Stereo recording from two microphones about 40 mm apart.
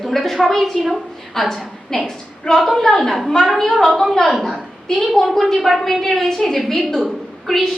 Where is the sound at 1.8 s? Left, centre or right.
Centre.